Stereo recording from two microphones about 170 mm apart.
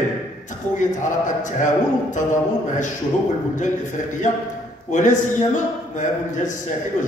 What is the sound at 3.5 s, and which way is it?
A man's voice, 45° left (ahead or behind).